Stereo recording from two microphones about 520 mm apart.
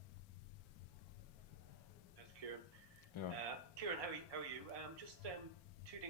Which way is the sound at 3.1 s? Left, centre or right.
Left.